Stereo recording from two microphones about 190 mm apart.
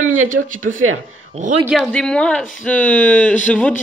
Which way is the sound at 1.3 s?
40° right (ahead or behind).